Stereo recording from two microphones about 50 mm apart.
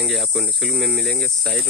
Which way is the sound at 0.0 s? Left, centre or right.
Centre.